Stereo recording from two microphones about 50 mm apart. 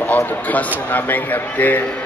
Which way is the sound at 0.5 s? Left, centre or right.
Left.